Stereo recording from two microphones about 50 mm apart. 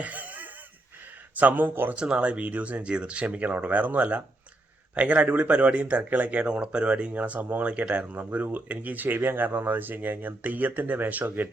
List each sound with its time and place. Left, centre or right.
0.0 s a sound: right
1.4 s speech: right
2.0 s speech: right